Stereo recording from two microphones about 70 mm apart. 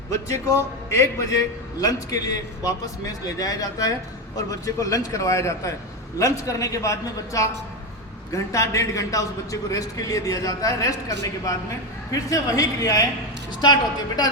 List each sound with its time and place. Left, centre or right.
0.1 s a man's voice: left
1.8 s a man's voice: left